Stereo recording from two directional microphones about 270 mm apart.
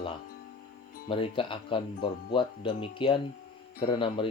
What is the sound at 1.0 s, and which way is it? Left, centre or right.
Speech, centre.